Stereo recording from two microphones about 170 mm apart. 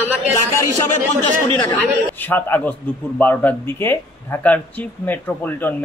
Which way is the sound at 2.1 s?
10° left (ahead or behind).